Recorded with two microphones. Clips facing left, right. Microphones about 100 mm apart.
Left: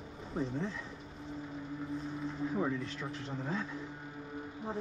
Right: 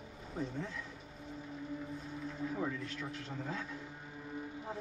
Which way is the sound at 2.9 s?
30° left (ahead or behind).